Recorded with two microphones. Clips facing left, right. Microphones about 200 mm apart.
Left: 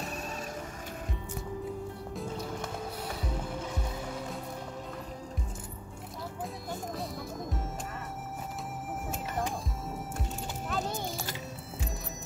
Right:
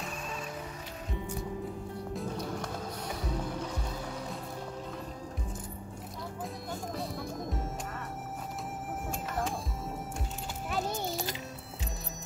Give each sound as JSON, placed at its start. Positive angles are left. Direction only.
{"t": 6.7, "sound": "music", "side_deg": 0}
{"t": 10.7, "sound": "music", "side_deg": -15}